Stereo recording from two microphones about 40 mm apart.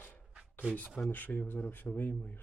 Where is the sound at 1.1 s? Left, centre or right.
Left.